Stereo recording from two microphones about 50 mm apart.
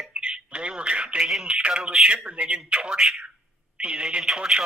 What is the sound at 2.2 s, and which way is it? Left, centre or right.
Speech, right.